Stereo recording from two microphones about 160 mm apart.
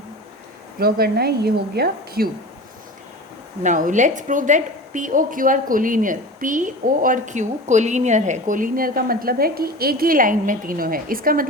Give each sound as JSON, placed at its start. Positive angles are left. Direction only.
{"t": 0.8, "sound": "a woman's voice", "side_deg": -70}
{"t": 3.6, "sound": "a woman's voice", "side_deg": -55}